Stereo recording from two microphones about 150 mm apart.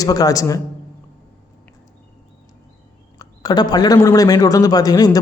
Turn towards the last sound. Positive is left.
turn(degrees=25)  # may be behind; listen again after turning